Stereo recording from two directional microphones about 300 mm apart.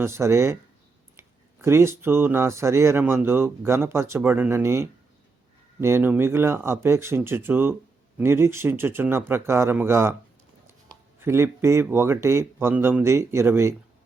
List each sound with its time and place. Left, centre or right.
0.0 s speech: centre
1.6 s speech: centre